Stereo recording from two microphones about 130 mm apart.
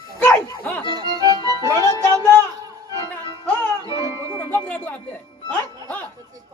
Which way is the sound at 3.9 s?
30° left (ahead or behind).